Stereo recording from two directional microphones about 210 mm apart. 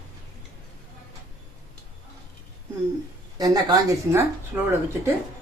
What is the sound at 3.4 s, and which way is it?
Speech, 15° right (ahead or behind).